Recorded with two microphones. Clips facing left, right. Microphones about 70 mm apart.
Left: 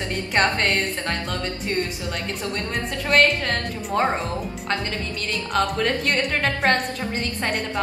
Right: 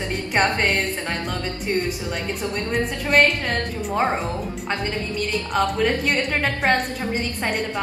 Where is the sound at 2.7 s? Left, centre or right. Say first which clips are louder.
Right 1 dB; centre.